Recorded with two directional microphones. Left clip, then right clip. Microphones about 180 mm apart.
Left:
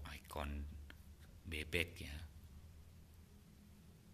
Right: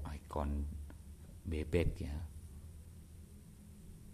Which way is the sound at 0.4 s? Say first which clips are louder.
Right 7 dB; 15° right (ahead or behind).